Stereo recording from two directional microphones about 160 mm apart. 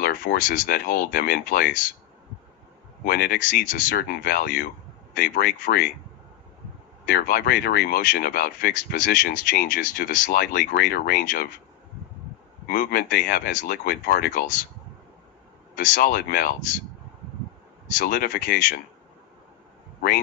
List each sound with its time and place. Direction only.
0.0 s speech: 65° left (ahead or behind)
3.1 s speech: 70° left (ahead or behind)
7.1 s speech: 65° left (ahead or behind)
12.6 s speech: 70° left (ahead or behind)
15.7 s speech: 60° left (ahead or behind)
17.9 s speech: 70° left (ahead or behind)